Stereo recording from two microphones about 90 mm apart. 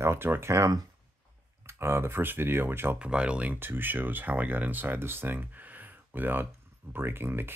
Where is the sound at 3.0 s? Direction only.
10° right (ahead or behind).